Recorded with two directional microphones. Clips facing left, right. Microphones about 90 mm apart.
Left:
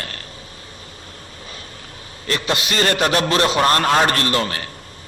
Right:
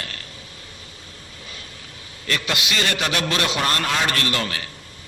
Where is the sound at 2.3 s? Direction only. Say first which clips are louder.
Left 3 dB; 35° left (ahead or behind).